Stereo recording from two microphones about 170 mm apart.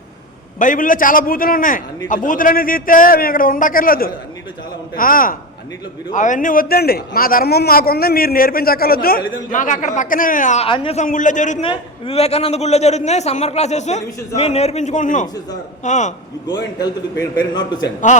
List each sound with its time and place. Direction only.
0.6 s a man's voice: 50° left (ahead or behind)
10.7 s a man's voice: 35° left (ahead or behind)
11.0 s a man's voice: 50° left (ahead or behind)
11.6 s a man's voice: 30° left (ahead or behind)
16.7 s a man's voice: 25° left (ahead or behind)